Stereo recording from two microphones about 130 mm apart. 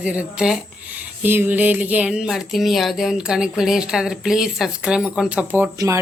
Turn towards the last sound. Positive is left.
turn(degrees=-10)  # may be behind; listen again after turning